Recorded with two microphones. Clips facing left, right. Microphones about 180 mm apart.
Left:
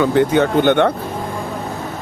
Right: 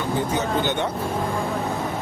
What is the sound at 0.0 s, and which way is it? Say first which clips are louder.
Speech: left 10 dB; 80° left.